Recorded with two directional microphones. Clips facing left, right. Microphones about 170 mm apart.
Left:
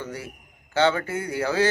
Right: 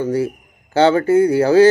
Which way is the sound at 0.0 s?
35° right (ahead or behind).